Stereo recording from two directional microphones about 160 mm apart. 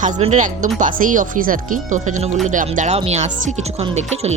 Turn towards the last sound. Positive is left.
turn(degrees=-40)  # may be behind; listen again after turning